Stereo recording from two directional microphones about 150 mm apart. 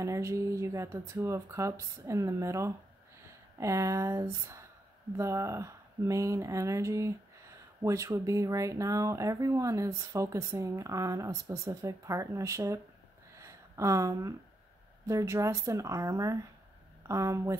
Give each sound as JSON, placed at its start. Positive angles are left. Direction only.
{"t": 0.0, "sound": "speech", "side_deg": -20}
{"t": 13.4, "sound": "a sound", "side_deg": -20}
{"t": 15.0, "sound": "speech", "side_deg": -20}